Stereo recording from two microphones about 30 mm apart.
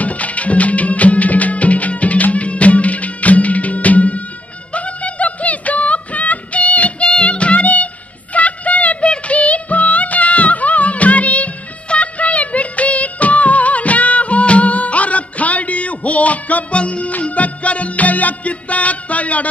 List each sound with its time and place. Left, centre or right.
0.0 s music: left
7.6 s music: left
11.9 s music of bollywood: left
16.7 s music: left